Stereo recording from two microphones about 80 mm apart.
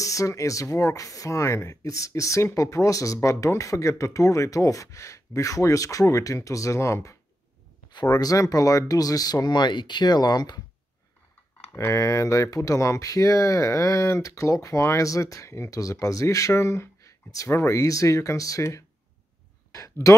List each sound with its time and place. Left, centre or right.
0.0 s speech: left
7.9 s speech: left
11.7 s speech: left
19.7 s a sound: left